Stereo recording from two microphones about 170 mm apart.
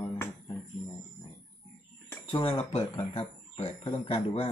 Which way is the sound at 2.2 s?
30° left (ahead or behind).